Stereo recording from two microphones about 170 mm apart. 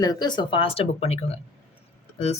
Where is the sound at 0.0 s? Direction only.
25° left (ahead or behind).